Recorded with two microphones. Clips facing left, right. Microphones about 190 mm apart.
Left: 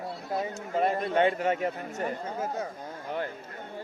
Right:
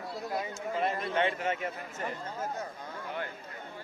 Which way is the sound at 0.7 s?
45° left (ahead or behind).